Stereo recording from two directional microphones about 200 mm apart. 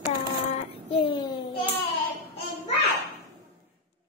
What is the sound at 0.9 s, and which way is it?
Speech, 25° left (ahead or behind).